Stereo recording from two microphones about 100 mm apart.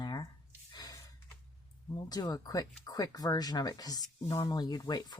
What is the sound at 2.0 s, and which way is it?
Speech, 40° left (ahead or behind).